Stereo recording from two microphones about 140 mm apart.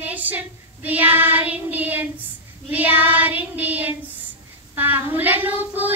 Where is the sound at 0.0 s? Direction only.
10° right (ahead or behind).